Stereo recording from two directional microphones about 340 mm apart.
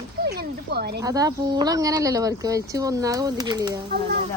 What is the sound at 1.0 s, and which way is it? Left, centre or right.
Speech, centre.